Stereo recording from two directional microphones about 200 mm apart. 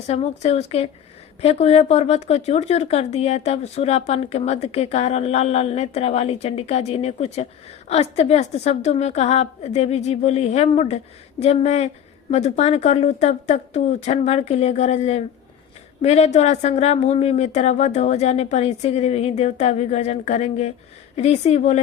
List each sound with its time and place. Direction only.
0.1 s speech: 30° left (ahead or behind)